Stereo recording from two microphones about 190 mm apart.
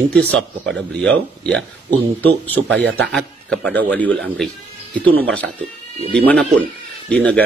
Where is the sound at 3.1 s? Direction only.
5° left (ahead or behind).